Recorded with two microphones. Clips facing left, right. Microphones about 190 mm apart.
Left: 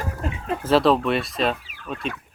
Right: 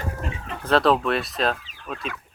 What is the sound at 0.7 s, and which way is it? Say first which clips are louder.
Speech: left 1 dB; centre (ahead or behind).